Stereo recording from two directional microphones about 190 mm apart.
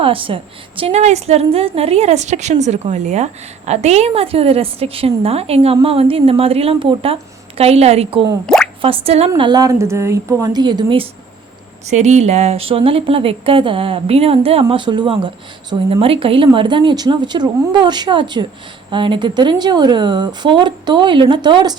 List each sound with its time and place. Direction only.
0.0 s a woman's voice: 30° right (ahead or behind)
8.4 s drip: 5° left (ahead or behind)
8.8 s a woman's voice: 30° right (ahead or behind)
9.3 s speech: 20° right (ahead or behind)